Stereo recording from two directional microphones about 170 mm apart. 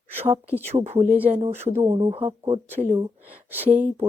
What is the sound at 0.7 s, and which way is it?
Speech, 40° right (ahead or behind).